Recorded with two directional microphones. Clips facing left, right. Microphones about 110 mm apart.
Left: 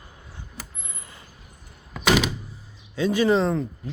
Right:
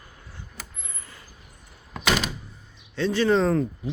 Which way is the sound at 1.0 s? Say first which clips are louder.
Left 1 dB; 20° left (ahead or behind).